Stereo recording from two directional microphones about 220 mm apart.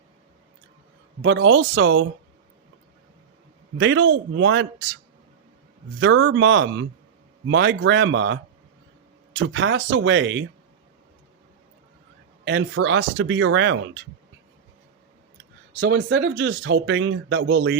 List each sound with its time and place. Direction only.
1.2 s speech: 60° right (ahead or behind)
3.8 s speech: 60° right (ahead or behind)
6.0 s speech: 60° right (ahead or behind)
12.5 s speech: 60° right (ahead or behind)
15.8 s speech: 60° right (ahead or behind)